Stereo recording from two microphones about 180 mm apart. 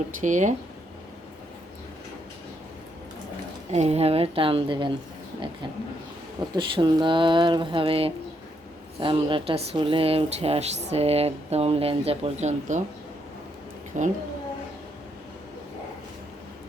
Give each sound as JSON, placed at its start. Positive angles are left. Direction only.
{"t": 0.2, "sound": "speech", "side_deg": -45}
{"t": 3.7, "sound": "speech", "side_deg": -35}
{"t": 6.6, "sound": "speech", "side_deg": -25}
{"t": 14.0, "sound": "speech", "side_deg": -40}